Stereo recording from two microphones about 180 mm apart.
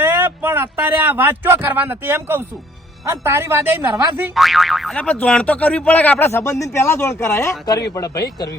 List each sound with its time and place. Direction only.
0.0 s a man's voice: 10° right (ahead or behind); by 8.2 s 20° left (ahead or behind)